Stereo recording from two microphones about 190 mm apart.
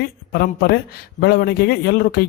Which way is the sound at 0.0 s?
55° left (ahead or behind).